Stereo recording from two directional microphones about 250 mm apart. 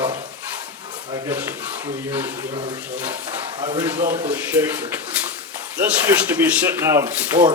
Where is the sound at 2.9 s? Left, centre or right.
Centre.